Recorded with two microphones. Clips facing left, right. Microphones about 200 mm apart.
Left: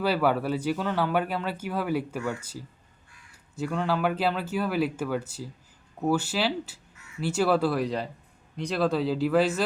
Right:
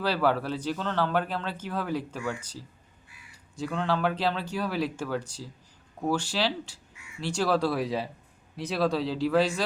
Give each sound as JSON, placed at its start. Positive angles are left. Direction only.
{"t": 0.0, "sound": "speech", "side_deg": 5}
{"t": 3.5, "sound": "speech", "side_deg": 5}